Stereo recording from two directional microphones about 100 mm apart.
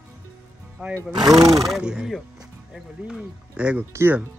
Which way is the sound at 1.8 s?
10° right (ahead or behind).